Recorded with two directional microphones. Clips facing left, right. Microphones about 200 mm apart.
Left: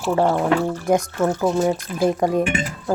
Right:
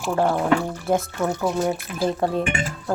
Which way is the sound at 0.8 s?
15° left (ahead or behind).